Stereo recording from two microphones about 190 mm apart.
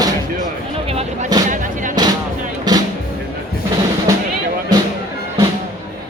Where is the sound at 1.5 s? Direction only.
45° right (ahead or behind).